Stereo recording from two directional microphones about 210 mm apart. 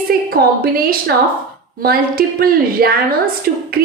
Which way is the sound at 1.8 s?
45° right (ahead or behind).